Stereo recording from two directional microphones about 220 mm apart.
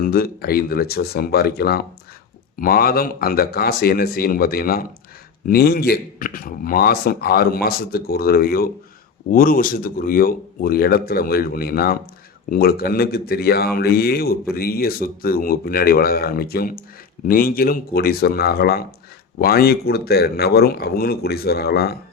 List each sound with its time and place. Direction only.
0.0 s a man's voice: 45° left (ahead or behind)